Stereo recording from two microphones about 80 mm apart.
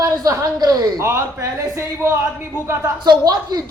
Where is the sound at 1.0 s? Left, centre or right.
Right.